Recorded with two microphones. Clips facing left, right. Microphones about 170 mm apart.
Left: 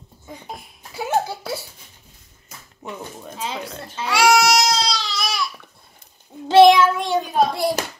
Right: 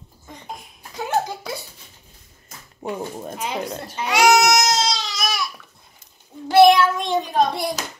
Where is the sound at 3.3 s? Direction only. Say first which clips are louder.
Right 1 dB; 15° right (ahead or behind).